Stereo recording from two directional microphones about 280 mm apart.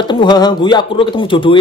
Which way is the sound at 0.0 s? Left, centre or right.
Centre.